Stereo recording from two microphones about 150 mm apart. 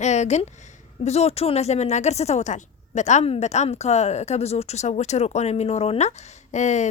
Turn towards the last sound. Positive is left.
turn(degrees=50)  # may be behind; listen again after turning